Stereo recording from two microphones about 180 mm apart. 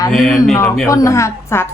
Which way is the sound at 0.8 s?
15° left (ahead or behind).